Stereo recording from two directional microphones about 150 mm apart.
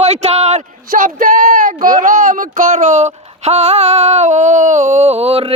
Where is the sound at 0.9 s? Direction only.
65° right (ahead or behind); by 5.5 s 45° right (ahead or behind).